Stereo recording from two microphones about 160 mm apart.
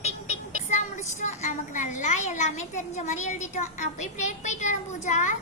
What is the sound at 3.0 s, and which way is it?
A child's voice, 50° left (ahead or behind).